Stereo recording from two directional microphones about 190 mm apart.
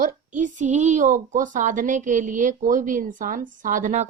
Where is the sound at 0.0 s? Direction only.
40° right (ahead or behind).